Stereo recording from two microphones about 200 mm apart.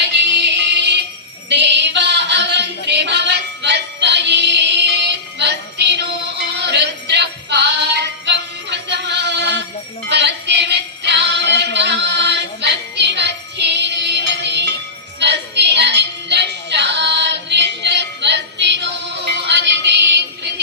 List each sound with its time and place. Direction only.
0.0 s music: 60° right (ahead or behind)
1.5 s a sound: 60° right (ahead or behind)
5.4 s music: 60° right (ahead or behind)